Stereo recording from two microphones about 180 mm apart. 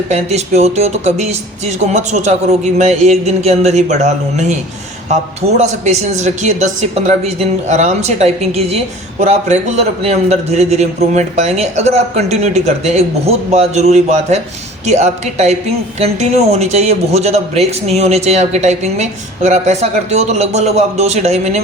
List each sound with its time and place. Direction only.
0.1 s a man's voice: 40° right (ahead or behind)
5.5 s a man's voice: 40° right (ahead or behind)
7.7 s a man's voice: 40° right (ahead or behind)